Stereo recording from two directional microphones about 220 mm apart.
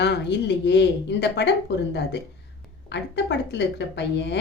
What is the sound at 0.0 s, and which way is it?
A woman's voice, 50° left (ahead or behind).